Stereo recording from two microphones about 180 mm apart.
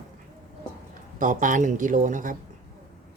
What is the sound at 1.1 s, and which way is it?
Speech, 45° right (ahead or behind).